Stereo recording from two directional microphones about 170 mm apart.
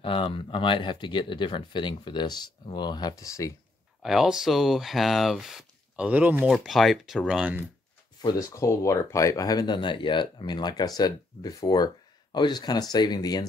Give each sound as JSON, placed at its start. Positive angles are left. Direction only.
{"t": 0.0, "sound": "speech", "side_deg": 30}
{"t": 4.0, "sound": "speech", "side_deg": 0}
{"t": 8.2, "sound": "speech", "side_deg": 25}